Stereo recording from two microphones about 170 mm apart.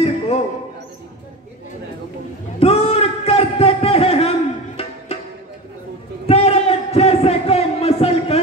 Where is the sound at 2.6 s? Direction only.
35° left (ahead or behind).